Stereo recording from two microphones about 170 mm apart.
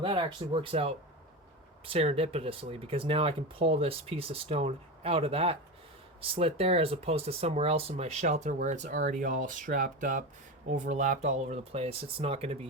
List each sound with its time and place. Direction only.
0.0 s speech: 30° right (ahead or behind)